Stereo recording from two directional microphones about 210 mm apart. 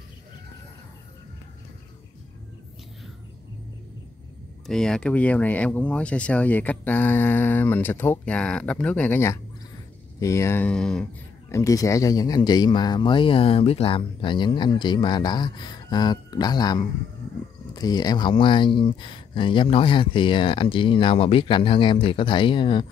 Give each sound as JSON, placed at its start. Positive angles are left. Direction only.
{"t": 4.6, "sound": "speech", "side_deg": 5}